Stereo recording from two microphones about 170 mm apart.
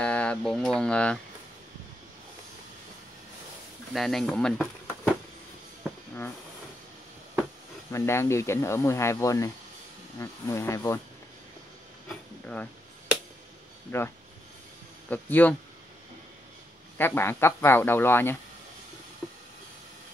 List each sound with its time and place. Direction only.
0.0 s speech: 5° left (ahead or behind)
3.9 s speech: centre (ahead or behind)
7.9 s speech: 15° left (ahead or behind)
13.9 s speech: 15° left (ahead or behind)
17.0 s speech: 15° left (ahead or behind)